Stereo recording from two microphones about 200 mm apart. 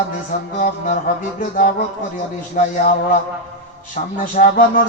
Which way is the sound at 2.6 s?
40° left (ahead or behind).